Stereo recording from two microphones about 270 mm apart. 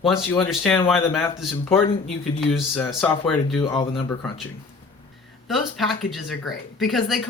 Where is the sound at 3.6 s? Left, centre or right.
Centre.